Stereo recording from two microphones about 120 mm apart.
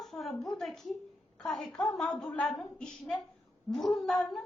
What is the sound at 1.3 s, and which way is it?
A woman's voice, 5° left (ahead or behind).